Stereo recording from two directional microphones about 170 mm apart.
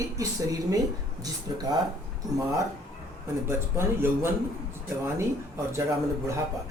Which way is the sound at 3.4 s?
15° right (ahead or behind).